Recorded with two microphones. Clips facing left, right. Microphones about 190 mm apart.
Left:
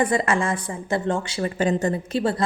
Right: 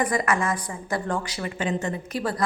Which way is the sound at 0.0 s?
25° left (ahead or behind).